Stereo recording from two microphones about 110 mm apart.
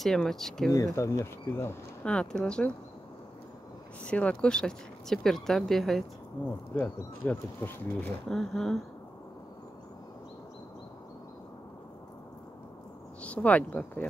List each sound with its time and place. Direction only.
0.0 s speech: 5° left (ahead or behind)
0.9 s speech: 25° left (ahead or behind)
2.0 s speech: 10° left (ahead or behind)
4.0 s speech: 10° left (ahead or behind)
6.7 s speech: 15° left (ahead or behind)
8.4 s speech: 5° left (ahead or behind)
13.2 s speech: 10° left (ahead or behind)